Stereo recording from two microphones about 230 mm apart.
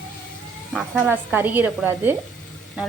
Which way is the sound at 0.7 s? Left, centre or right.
Centre.